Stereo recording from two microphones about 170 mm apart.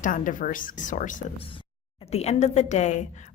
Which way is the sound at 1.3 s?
30° left (ahead or behind).